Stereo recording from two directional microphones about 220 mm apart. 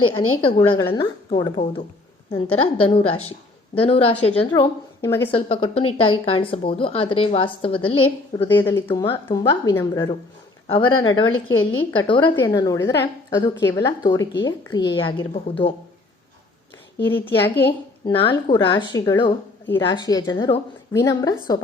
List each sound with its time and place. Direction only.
0.4 s a woman's voice: 20° left (ahead or behind)
5.3 s a woman's voice: 25° left (ahead or behind)
8.5 s a woman's voice: 10° left (ahead or behind)
11.3 s a woman's voice: 65° left (ahead or behind)
11.9 s a woman's voice: 20° left (ahead or behind)
17.0 s speech: 10° left (ahead or behind)
17.5 s a woman's voice: 50° left (ahead or behind)
18.0 s a woman's voice: 25° left (ahead or behind)